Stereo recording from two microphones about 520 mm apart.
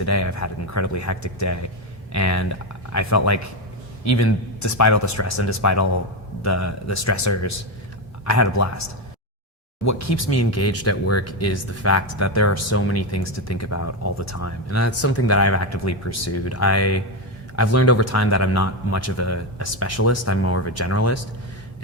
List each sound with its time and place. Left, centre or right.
0.0 s speech: left
9.8 s speech: left